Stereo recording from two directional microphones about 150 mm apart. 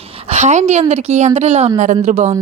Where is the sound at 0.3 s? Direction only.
50° right (ahead or behind).